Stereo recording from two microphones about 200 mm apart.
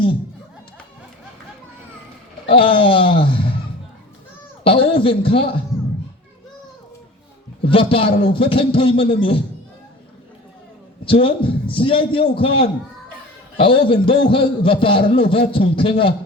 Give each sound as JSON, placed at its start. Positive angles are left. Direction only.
{"t": 2.5, "sound": "a man's voice", "side_deg": 25}
{"t": 4.6, "sound": "a man's voice", "side_deg": 25}
{"t": 7.6, "sound": "a man's voice", "side_deg": 25}
{"t": 11.0, "sound": "a man's voice", "side_deg": 25}